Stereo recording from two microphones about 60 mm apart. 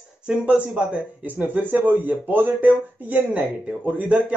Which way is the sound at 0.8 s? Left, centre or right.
Centre.